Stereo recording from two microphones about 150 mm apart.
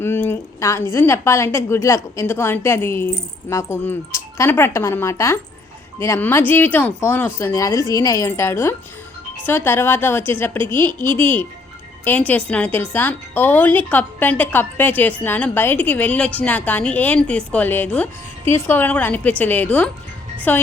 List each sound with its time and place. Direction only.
0.0 s a woman's voice: 15° left (ahead or behind)